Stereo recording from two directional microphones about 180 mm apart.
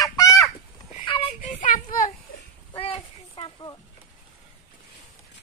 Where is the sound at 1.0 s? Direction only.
25° left (ahead or behind).